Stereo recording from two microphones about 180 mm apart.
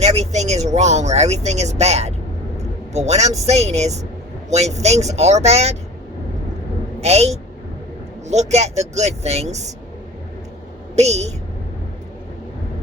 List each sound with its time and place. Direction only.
0.0 s speech: 35° right (ahead or behind)
7.0 s speech: 35° right (ahead or behind)
10.9 s speech: 35° right (ahead or behind)